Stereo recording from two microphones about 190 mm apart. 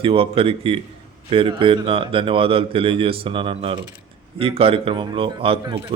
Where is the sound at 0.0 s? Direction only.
30° right (ahead or behind).